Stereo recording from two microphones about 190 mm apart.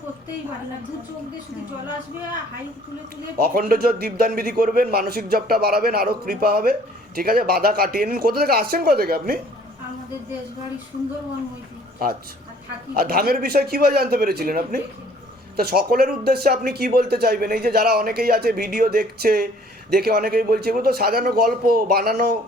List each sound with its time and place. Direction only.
3.3 s speech: 50° right (ahead or behind)
12.0 s speech: 50° right (ahead or behind)